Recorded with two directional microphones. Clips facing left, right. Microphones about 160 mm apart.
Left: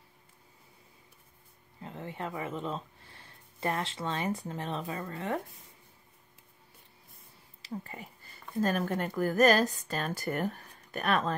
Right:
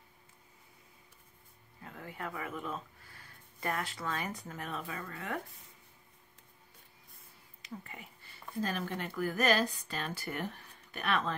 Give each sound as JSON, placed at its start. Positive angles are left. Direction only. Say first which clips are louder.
{"t": 1.8, "sound": "speech", "louder": "left 5 dB", "side_deg": 25}
{"t": 7.6, "sound": "speech", "louder": "left 6 dB", "side_deg": 35}